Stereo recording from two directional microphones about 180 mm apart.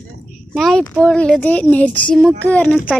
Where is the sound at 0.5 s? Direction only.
5° left (ahead or behind).